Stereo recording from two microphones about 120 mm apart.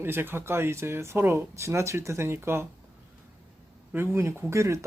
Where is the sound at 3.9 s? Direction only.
20° right (ahead or behind).